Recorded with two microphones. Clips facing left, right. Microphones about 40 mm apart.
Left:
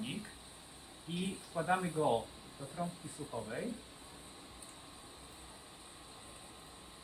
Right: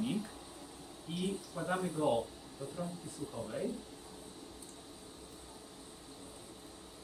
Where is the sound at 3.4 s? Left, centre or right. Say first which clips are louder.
Left 1 dB; left.